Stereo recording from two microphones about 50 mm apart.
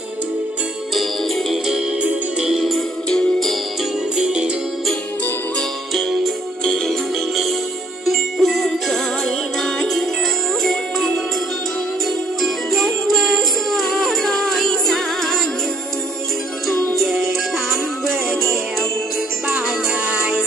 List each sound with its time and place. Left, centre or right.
2.4 s music: centre
4.2 s music: centre
5.9 s music: centre
8.0 s music: centre
12.4 s music: centre
18.0 s music: centre
20.1 s music: right